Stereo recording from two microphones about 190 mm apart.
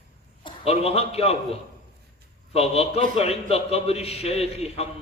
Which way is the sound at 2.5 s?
30° left (ahead or behind).